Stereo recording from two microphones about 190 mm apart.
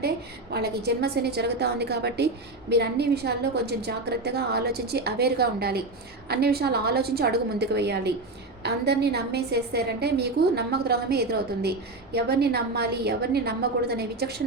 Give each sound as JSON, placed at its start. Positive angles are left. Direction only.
{"t": 0.5, "sound": "a woman's voice", "side_deg": -60}